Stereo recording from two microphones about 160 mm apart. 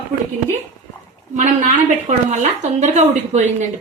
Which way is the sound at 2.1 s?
50° right (ahead or behind).